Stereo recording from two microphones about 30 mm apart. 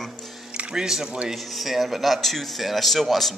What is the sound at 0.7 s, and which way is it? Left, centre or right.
Speech, centre.